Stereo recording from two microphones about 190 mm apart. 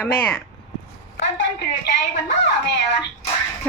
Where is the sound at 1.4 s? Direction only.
65° left (ahead or behind).